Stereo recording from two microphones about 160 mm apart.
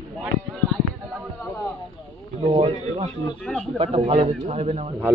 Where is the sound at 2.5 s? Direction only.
35° right (ahead or behind).